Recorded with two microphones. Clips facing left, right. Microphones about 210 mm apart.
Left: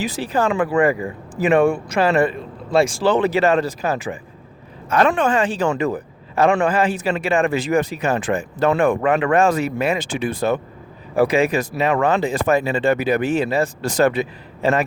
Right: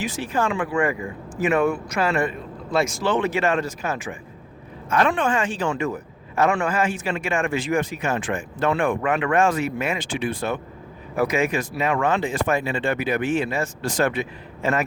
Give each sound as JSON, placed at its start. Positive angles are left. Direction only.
{"t": 0.0, "sound": "speech", "side_deg": 35}